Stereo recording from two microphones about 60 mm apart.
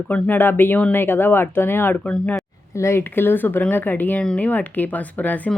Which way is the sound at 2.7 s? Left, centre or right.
Left.